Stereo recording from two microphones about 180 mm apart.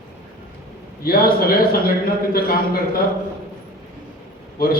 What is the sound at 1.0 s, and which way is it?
A man's voice, 55° left (ahead or behind).